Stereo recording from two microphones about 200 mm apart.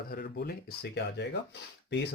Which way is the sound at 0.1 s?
50° left (ahead or behind).